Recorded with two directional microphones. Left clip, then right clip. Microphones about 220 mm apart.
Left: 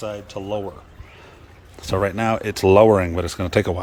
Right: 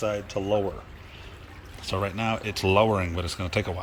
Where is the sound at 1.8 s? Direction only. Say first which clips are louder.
Left 7 dB; 25° left (ahead or behind).